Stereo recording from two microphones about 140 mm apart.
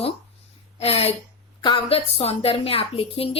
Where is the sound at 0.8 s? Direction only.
45° left (ahead or behind).